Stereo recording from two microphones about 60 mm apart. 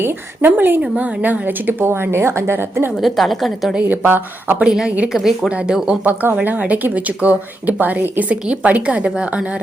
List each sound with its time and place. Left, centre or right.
0.0 s a woman's voice: right
3.0 s a woman's voice: centre
3.8 s a woman's voice: right
4.6 s speech: centre
5.1 s a woman's voice: centre
5.5 s speech: centre
6.4 s speech: right